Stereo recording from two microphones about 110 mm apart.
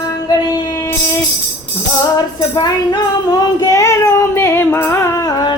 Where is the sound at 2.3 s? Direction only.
40° left (ahead or behind).